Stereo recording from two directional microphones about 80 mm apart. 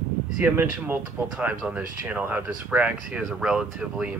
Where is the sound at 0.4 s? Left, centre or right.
Right.